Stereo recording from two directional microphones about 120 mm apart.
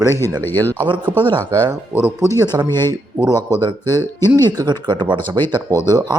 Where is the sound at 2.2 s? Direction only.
25° left (ahead or behind).